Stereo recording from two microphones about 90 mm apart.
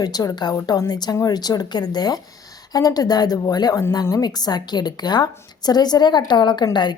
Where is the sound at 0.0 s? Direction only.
45° left (ahead or behind).